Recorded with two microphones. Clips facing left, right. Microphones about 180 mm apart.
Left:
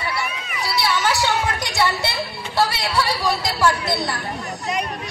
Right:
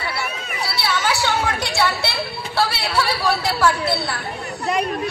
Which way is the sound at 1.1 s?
15° left (ahead or behind).